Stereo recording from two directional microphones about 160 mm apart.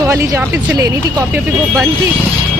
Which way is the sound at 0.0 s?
20° right (ahead or behind).